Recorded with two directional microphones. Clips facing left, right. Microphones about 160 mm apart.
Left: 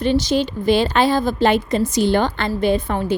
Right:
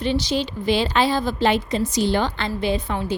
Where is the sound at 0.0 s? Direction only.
50° left (ahead or behind).